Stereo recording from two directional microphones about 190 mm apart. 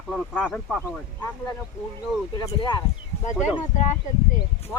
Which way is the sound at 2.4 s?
20° left (ahead or behind).